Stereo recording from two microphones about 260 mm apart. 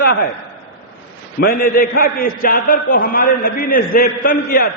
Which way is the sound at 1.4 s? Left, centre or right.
Left.